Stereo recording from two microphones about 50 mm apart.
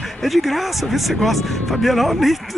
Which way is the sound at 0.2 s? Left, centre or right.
Centre.